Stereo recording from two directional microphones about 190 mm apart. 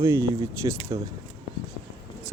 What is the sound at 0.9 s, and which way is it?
Speech, 25° right (ahead or behind).